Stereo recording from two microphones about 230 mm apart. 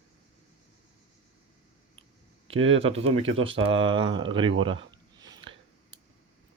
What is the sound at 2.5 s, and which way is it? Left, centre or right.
Speech, right.